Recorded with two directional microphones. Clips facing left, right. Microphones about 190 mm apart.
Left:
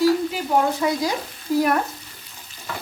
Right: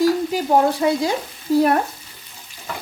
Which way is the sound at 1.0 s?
25° right (ahead or behind).